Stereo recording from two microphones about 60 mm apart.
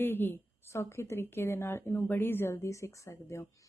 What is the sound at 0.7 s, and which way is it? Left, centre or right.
Speech, left.